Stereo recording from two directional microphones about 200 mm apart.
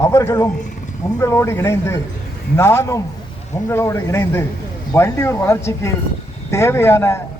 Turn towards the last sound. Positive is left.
turn(degrees=10)  # may be behind; listen again after turning